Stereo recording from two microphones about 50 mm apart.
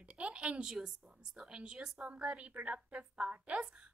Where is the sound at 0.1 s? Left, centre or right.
Right.